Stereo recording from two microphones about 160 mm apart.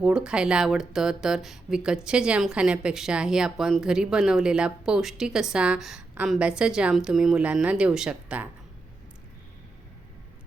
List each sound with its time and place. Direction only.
0.0 s speech: 5° right (ahead or behind)